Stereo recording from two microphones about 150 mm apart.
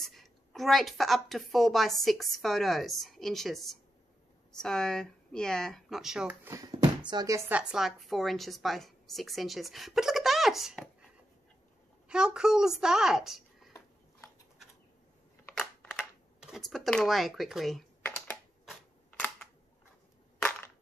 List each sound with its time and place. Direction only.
0.0 s a woman's voice: centre (ahead or behind)
6.4 s speech: 25° right (ahead or behind)
7.7 s a woman's voice: centre (ahead or behind)
12.1 s a woman's voice: 5° right (ahead or behind)
15.5 s a sound: 5° left (ahead or behind)
16.3 s a woman's voice: 5° right (ahead or behind)
18.0 s computer keyboard: 15° left (ahead or behind)